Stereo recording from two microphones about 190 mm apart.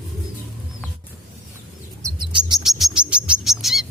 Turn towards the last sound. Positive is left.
turn(degrees=0)  # may be behind; listen again after turning